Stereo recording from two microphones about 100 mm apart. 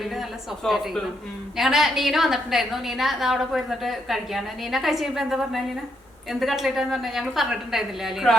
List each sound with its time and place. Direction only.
0.0 s a woman's voice: centre (ahead or behind)